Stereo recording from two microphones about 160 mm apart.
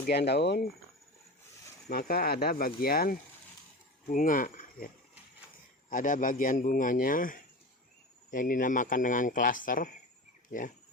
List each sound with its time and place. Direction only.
0.0 s speech: 90° left
1.9 s speech: 75° left (ahead or behind)
5.9 s speech: 55° left (ahead or behind)